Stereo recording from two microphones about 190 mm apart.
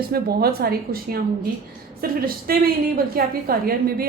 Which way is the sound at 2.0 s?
50° right (ahead or behind).